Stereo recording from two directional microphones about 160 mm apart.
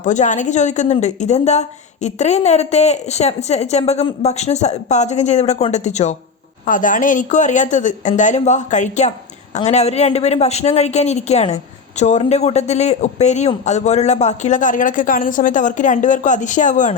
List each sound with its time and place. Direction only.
0.0 s a woman's voice: 50° left (ahead or behind)